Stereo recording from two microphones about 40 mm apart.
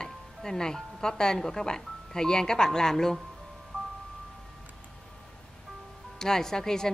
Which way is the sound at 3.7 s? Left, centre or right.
Left.